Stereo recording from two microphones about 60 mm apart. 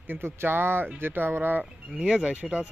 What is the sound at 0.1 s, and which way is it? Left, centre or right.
Speech, right.